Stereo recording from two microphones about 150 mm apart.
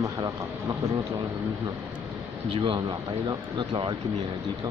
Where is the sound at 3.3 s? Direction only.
30° right (ahead or behind).